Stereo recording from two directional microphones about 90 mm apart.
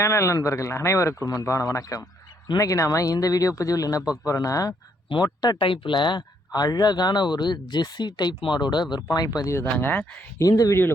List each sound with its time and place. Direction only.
0.0 s speech: 35° left (ahead or behind)
5.5 s speech: 70° left (ahead or behind); by 9.5 s 45° left (ahead or behind)
9.7 s speech: 15° left (ahead or behind)
10.3 s speech: 40° left (ahead or behind)